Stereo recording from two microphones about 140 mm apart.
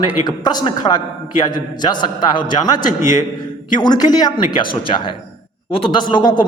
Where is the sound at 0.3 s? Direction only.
30° left (ahead or behind).